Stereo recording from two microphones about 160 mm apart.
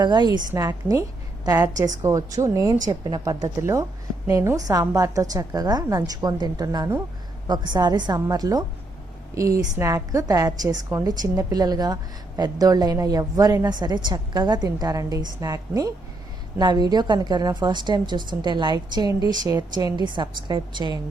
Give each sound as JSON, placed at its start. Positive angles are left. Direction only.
{"t": 0.0, "sound": "a woman's voice", "side_deg": -25}